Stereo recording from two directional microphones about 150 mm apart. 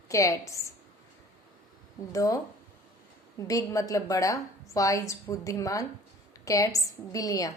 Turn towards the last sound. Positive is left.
turn(degrees=25)  # may be behind; listen again after turning